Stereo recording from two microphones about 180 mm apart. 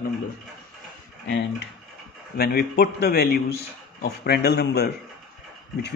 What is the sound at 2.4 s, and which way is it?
A man's voice, 60° left (ahead or behind).